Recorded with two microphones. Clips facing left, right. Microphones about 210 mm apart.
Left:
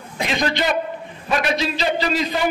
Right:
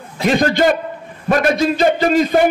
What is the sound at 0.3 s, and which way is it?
A man's voice, 45° right (ahead or behind).